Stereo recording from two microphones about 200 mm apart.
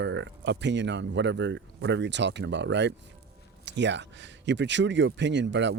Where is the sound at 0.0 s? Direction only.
65° right (ahead or behind).